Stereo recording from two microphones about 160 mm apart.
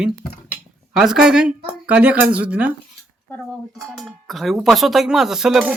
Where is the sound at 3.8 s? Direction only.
Centre (ahead or behind).